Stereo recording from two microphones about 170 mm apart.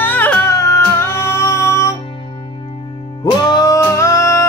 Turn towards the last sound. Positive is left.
turn(degrees=20)  # may be behind; listen again after turning